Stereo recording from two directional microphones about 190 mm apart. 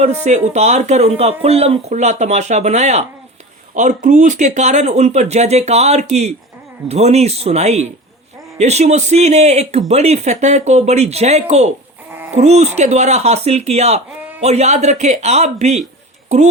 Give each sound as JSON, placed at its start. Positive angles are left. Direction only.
{"t": 0.3, "sound": "speech", "side_deg": -35}